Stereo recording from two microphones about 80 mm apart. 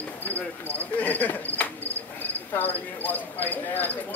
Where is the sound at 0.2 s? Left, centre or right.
Left.